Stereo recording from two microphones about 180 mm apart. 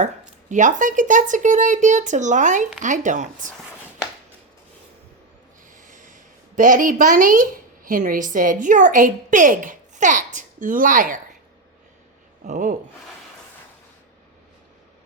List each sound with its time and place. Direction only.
0.0 s a woman's voice: 45° right (ahead or behind)
5.7 s snort: 45° right (ahead or behind)
6.6 s a woman's voice: 45° right (ahead or behind)
12.5 s a woman's voice: 45° right (ahead or behind)